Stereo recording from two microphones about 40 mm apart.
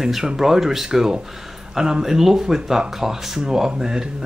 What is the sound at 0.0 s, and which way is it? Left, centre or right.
Speech, centre.